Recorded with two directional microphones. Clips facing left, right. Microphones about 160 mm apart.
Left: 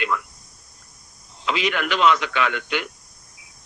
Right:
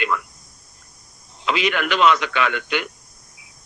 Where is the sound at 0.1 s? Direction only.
70° right (ahead or behind).